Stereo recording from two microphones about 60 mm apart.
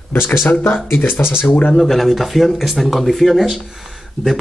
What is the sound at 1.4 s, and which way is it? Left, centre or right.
Speech, left.